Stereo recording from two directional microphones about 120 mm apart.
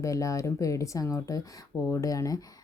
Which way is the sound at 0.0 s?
25° left (ahead or behind).